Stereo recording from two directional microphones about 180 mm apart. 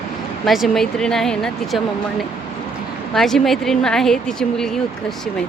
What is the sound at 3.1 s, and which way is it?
A woman's voice, centre (ahead or behind).